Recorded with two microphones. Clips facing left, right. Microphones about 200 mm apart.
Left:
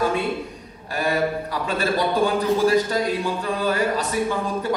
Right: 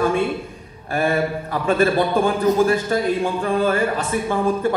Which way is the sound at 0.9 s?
55° right (ahead or behind).